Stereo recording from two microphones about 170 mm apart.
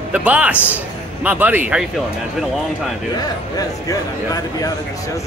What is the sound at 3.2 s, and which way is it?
Speech, 20° left (ahead or behind).